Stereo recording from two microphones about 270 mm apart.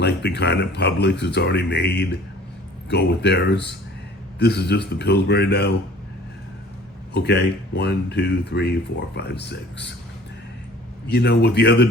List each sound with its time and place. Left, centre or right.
0.0 s speech: left
7.1 s speech: left
11.1 s speech: left